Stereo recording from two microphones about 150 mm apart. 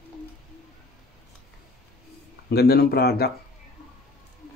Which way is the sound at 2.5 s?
90° left.